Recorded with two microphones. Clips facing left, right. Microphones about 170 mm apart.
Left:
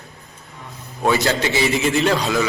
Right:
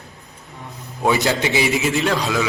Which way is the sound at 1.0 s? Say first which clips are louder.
Even; 15° right (ahead or behind).